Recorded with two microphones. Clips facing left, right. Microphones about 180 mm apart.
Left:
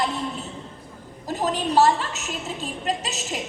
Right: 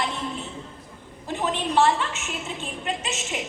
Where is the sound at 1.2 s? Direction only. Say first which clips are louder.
Left 2 dB; 40° left (ahead or behind).